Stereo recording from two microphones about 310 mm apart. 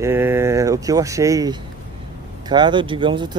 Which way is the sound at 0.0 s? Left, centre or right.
Centre.